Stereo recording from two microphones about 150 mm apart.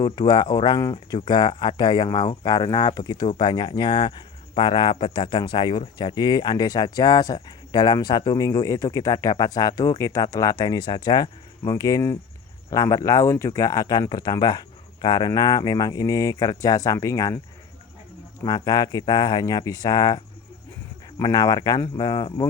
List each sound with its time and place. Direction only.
0.0 s a man's voice: 30° left (ahead or behind)
18.4 s speech: 25° left (ahead or behind)